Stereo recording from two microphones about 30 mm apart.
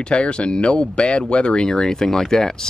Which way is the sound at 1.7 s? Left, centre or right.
Centre.